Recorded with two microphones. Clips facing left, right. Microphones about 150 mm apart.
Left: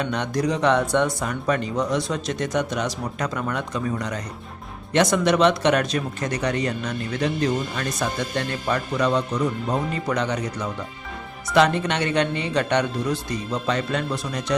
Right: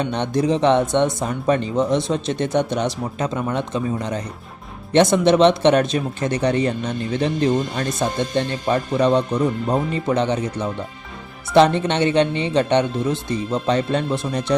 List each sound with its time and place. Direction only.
0.0 s speech: 30° right (ahead or behind)